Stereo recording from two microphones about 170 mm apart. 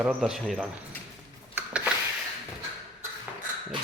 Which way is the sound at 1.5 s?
10° right (ahead or behind).